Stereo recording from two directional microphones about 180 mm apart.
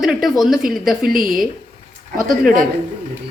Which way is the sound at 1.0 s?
50° right (ahead or behind).